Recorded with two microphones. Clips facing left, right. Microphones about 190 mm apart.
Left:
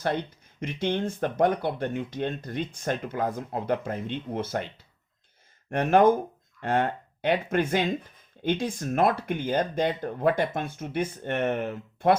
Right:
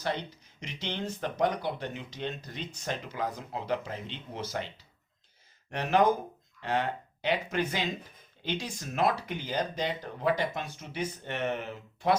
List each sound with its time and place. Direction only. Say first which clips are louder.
0.0 s speech: left 5 dB; 55° left (ahead or behind)